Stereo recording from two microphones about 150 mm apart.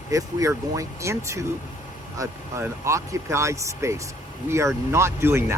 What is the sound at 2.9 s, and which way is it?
Speech, 20° right (ahead or behind).